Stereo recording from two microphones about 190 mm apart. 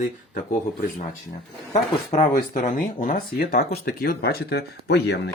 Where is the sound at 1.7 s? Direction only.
40° left (ahead or behind).